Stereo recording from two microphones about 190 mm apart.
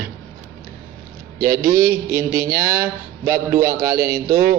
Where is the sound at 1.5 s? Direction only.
15° right (ahead or behind).